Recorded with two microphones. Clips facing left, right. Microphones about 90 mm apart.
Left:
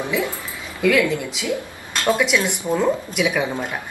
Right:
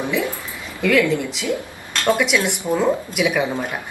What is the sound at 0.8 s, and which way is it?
Speech, 5° left (ahead or behind).